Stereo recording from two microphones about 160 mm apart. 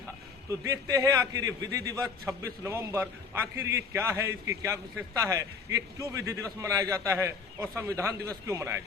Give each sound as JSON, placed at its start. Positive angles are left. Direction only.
{"t": 0.5, "sound": "a man's voice", "side_deg": -20}